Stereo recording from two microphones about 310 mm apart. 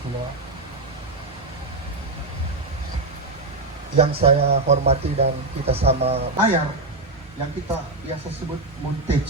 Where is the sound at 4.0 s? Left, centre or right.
Centre.